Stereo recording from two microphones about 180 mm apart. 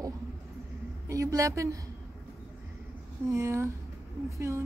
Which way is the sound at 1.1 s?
20° right (ahead or behind).